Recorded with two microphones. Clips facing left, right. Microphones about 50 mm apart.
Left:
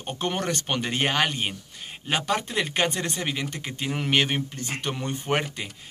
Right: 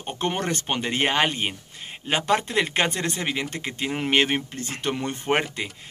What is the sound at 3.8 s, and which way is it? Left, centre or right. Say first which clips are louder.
Speech: right 2 dB; right.